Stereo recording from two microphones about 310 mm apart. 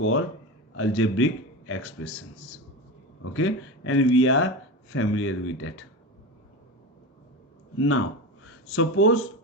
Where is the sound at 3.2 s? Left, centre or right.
Left.